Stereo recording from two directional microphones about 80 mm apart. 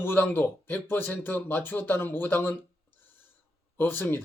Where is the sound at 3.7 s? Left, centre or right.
Left.